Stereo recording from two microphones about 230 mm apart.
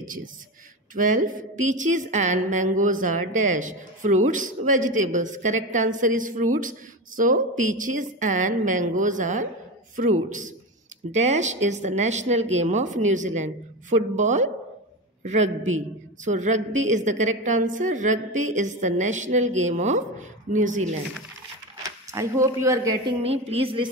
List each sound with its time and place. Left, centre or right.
0.0 s a man's voice: right
11.1 s a woman's voice: right
21.8 s speech: centre
23.2 s a woman's voice: right